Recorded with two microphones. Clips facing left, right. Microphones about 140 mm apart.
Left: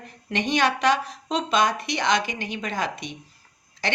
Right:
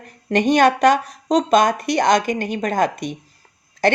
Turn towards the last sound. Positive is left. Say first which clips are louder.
# right 10 dB
turn(degrees=-50)  # may be behind; listen again after turning